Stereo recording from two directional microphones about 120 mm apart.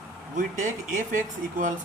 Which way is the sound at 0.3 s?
90° right.